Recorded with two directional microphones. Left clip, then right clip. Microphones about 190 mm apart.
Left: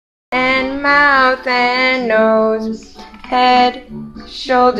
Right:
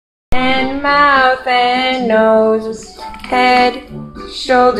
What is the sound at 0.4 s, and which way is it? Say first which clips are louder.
Music: even; 5° left (ahead or behind).